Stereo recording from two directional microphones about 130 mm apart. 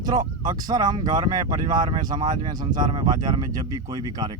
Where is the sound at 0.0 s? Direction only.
30° right (ahead or behind).